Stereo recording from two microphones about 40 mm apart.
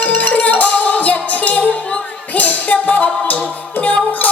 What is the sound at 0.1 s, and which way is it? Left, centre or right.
Music, left.